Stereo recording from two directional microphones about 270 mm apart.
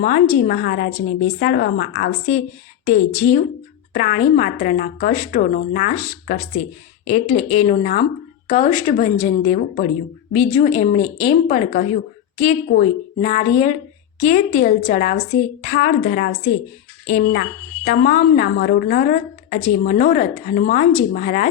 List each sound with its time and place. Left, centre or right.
0.0 s a woman's voice: left